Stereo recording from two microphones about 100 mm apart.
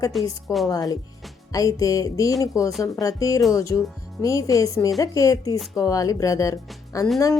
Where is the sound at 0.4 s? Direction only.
Centre (ahead or behind).